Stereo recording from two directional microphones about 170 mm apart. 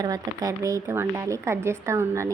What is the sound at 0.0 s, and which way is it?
A woman's voice, 20° right (ahead or behind).